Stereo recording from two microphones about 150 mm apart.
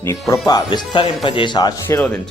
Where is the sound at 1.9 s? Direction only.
15° left (ahead or behind).